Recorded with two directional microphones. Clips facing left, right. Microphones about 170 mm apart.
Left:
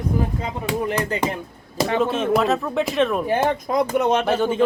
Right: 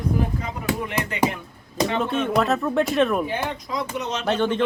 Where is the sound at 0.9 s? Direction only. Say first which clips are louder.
Left 4 dB; 35° left (ahead or behind).